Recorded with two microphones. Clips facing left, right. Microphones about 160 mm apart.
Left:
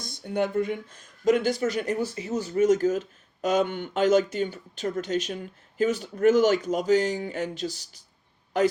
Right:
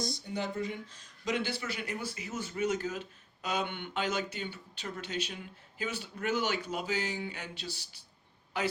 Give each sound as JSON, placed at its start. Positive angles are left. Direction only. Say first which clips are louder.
{"t": 0.0, "sound": "speech", "louder": "left 8 dB", "side_deg": 55}